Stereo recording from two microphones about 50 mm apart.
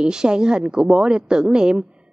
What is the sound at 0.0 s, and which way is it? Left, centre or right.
A woman's voice, centre.